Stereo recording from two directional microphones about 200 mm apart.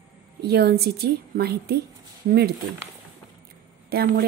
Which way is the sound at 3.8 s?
50° right (ahead or behind).